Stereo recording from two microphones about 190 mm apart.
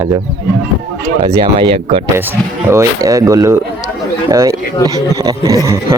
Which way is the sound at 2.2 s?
10° right (ahead or behind).